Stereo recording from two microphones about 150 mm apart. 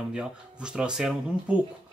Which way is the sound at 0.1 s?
5° right (ahead or behind).